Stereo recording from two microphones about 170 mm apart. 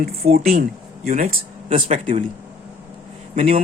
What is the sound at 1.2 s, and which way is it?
Speech, 45° right (ahead or behind).